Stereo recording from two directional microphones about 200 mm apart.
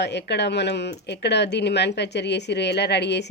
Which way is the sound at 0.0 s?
60° left (ahead or behind).